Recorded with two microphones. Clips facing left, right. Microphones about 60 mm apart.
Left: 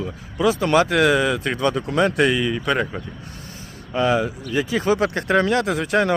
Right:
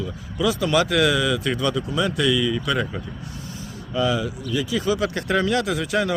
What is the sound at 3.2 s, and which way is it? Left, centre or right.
Vehicle, left.